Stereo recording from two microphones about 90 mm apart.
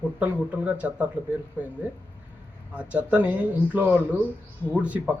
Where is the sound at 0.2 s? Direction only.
15° right (ahead or behind).